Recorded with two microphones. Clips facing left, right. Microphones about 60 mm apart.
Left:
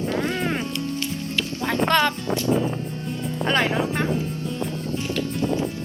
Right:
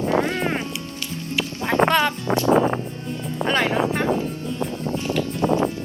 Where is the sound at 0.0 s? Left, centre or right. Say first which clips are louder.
Right 3 dB; centre.